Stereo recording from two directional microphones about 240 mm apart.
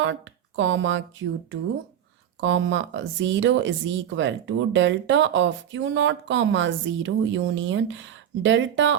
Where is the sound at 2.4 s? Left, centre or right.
Right.